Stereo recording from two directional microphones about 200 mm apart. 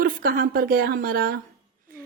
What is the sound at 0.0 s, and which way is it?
A woman's voice, 45° right (ahead or behind).